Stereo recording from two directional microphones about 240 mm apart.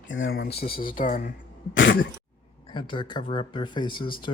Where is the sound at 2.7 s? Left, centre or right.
Centre.